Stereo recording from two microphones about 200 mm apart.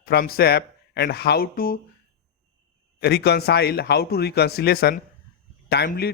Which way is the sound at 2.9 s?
55° left (ahead or behind).